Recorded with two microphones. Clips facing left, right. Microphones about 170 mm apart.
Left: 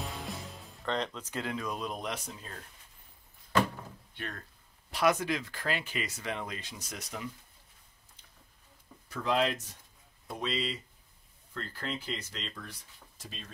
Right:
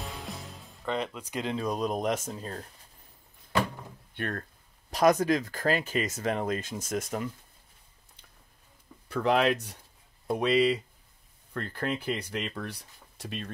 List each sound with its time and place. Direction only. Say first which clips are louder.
0.0 s music: even; centre (ahead or behind)
0.8 s speech: right 2 dB; 10° right (ahead or behind)
1.6 s speech: right 7 dB; 40° right (ahead or behind)
4.1 s speech: right 9 dB; 55° right (ahead or behind)
4.9 s speech: right 6 dB; 40° right (ahead or behind)
9.1 s speech: right 5 dB; 65° right (ahead or behind)